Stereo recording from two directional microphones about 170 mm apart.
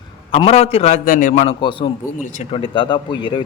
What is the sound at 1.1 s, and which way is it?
Speech, 50° left (ahead or behind).